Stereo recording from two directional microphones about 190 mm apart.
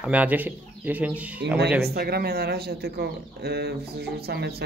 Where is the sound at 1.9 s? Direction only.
55° right (ahead or behind).